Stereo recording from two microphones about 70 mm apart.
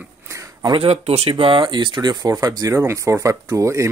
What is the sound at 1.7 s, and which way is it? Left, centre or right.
Speech, right.